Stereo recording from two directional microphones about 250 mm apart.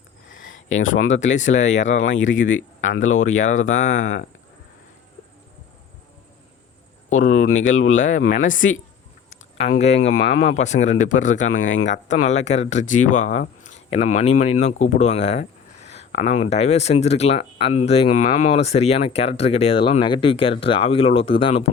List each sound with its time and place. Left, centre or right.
0.8 s speech: left
1.1 s speech: left
2.0 s speech: left
7.3 s speech: left
7.9 s speech: left
9.7 s speech: left
10.2 s speech: left
10.5 s speech: left